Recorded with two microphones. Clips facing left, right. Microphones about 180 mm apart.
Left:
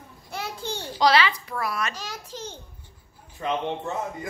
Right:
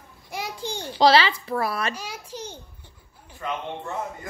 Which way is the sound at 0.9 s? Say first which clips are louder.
Right 3 dB; 30° right (ahead or behind).